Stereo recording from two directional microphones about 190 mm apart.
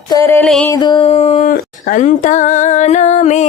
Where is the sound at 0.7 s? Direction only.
20° left (ahead or behind).